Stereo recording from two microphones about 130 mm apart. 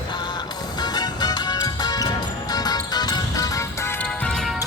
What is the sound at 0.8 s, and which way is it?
Music, 30° left (ahead or behind).